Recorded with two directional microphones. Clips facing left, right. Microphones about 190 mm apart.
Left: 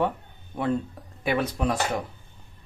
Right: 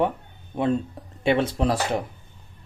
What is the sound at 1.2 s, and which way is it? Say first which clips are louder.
Speech: right 4 dB; 25° right (ahead or behind).